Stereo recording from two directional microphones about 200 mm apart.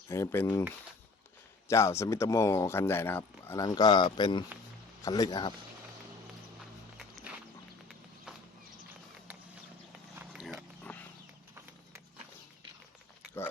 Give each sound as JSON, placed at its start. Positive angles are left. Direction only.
{"t": 0.1, "sound": "speech", "side_deg": 15}
{"t": 1.6, "sound": "speech", "side_deg": 15}
{"t": 7.9, "sound": "walk", "side_deg": 0}
{"t": 10.2, "sound": "a sound", "side_deg": -5}
{"t": 10.9, "sound": "horse", "side_deg": 10}